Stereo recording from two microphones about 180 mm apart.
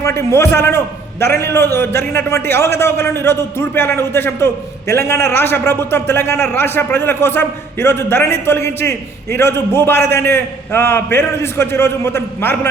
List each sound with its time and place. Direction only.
0.0 s a man's voice: 15° left (ahead or behind)